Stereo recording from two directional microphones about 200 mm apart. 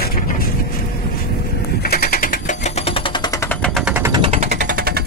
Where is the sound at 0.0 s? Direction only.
50° left (ahead or behind).